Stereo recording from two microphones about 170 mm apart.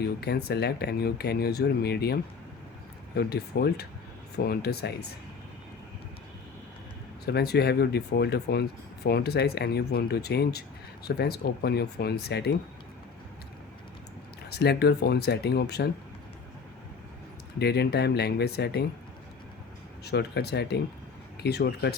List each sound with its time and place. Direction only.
0.0 s speech: 70° left (ahead or behind)
3.2 s speech: 70° left (ahead or behind)
7.3 s speech: 70° left (ahead or behind)
14.5 s speech: 75° left (ahead or behind)
17.6 s speech: 75° left (ahead or behind)
20.1 s speech: 75° left (ahead or behind)